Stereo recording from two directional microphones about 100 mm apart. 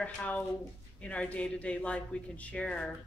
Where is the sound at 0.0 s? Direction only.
15° left (ahead or behind).